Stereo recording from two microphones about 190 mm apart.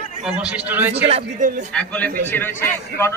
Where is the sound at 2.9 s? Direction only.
55° left (ahead or behind).